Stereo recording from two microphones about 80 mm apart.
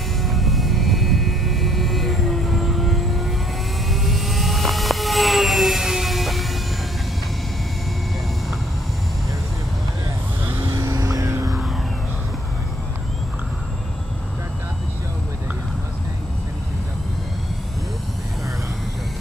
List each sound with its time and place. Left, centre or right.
0.2 s music: centre
3.9 s vehicle: centre
10.7 s vehicle: right